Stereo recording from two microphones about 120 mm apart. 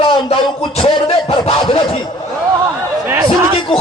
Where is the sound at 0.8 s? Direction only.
50° left (ahead or behind).